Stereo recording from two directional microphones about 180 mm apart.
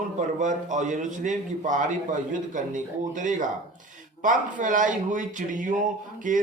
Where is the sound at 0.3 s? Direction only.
45° right (ahead or behind).